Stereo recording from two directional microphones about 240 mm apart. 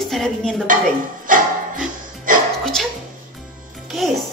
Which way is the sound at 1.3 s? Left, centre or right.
Right.